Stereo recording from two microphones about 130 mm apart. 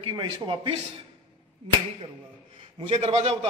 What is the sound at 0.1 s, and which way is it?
Speech, 35° right (ahead or behind).